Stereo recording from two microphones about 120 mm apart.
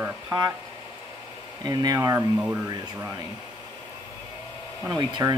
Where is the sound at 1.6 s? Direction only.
35° right (ahead or behind).